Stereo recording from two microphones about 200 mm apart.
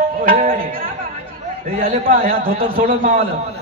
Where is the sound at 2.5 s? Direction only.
30° right (ahead or behind).